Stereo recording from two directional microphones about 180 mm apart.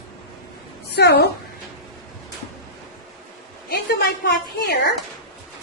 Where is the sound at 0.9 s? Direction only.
65° left (ahead or behind).